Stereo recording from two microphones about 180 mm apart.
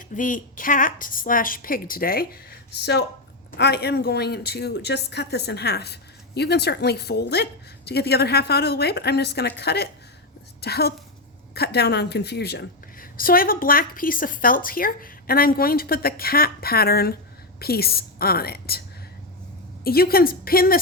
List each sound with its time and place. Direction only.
0.1 s a woman's voice: 45° left (ahead or behind)
19.8 s a woman's voice: 55° left (ahead or behind)